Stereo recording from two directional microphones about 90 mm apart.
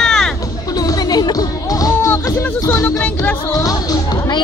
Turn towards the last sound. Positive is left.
turn(degrees=40)  # may be behind; listen again after turning